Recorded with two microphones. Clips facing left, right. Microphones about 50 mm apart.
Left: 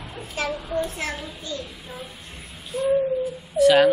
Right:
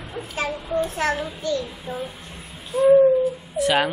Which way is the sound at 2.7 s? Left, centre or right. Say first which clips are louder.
Right 7 dB; right.